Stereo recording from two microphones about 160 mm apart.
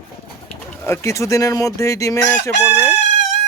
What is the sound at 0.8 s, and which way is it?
Speech, 15° left (ahead or behind).